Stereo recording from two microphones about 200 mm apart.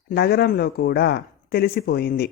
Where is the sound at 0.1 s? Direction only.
55° left (ahead or behind).